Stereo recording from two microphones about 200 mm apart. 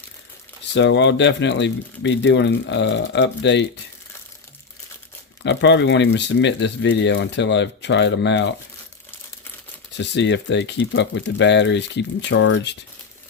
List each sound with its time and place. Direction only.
0.7 s speech: 60° left (ahead or behind)
5.4 s speech: 65° left (ahead or behind)
10.0 s speech: 60° left (ahead or behind)